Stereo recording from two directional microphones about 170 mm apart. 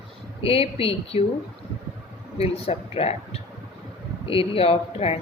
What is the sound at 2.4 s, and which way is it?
A woman's voice, 35° left (ahead or behind).